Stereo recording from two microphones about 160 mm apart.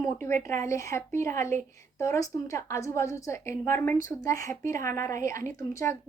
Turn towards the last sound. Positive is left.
turn(degrees=20)  # may be behind; listen again after turning